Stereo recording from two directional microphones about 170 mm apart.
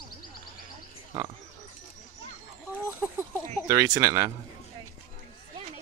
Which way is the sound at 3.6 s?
20° right (ahead or behind).